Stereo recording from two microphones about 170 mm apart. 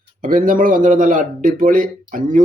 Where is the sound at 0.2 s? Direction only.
55° right (ahead or behind).